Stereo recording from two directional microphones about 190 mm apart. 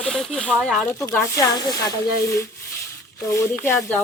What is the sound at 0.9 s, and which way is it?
Speech, 15° left (ahead or behind).